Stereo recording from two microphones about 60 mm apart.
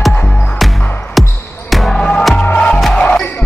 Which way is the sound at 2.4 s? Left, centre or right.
Left.